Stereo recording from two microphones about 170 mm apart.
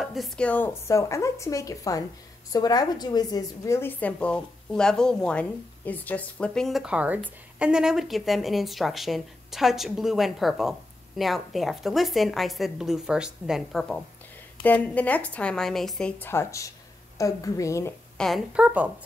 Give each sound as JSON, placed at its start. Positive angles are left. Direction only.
{"t": 0.0, "sound": "a woman's voice", "side_deg": 0}
{"t": 18.1, "sound": "a woman's voice", "side_deg": 0}